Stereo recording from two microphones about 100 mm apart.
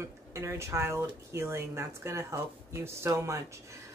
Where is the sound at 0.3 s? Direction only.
30° right (ahead or behind).